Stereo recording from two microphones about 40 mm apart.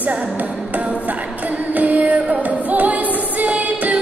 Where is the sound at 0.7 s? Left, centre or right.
Right.